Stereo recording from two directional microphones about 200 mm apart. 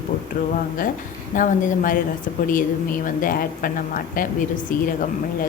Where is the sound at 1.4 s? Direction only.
40° left (ahead or behind).